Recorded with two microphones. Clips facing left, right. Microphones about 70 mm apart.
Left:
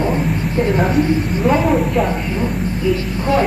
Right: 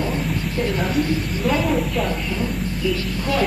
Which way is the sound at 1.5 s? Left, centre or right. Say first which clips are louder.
Left 5 dB; left.